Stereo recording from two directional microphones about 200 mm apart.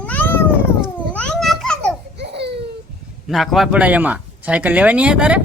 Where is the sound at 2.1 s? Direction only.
55° right (ahead or behind).